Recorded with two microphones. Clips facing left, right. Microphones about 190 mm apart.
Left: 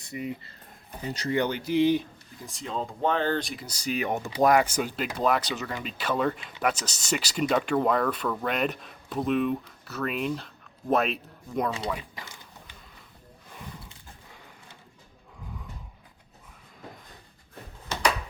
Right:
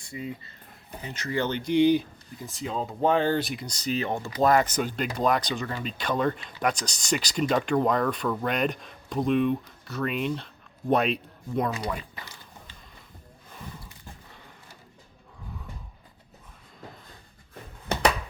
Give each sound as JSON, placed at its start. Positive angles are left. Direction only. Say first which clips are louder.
{"t": 0.0, "sound": "speech", "louder": "left 2 dB", "side_deg": 20}
{"t": 1.0, "sound": "speech", "louder": "left 5 dB", "side_deg": 35}
{"t": 1.3, "sound": "speech", "louder": "left 2 dB", "side_deg": 15}
{"t": 1.5, "sound": "speech", "louder": "right 5 dB", "side_deg": 5}